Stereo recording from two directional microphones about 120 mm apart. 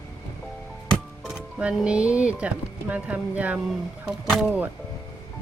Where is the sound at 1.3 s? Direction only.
5° right (ahead or behind).